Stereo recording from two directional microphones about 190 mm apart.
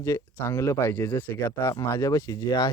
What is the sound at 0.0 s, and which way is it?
Speech, 15° left (ahead or behind).